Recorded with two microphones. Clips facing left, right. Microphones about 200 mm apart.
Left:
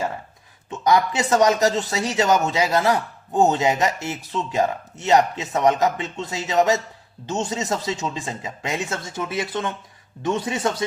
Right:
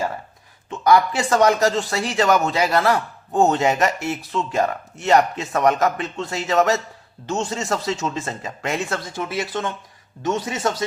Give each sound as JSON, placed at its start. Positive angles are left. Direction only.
{"t": 0.7, "sound": "speech", "side_deg": 20}
{"t": 10.2, "sound": "speech", "side_deg": 25}